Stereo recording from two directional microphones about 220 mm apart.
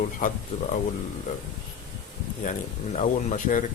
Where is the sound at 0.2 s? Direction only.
35° left (ahead or behind).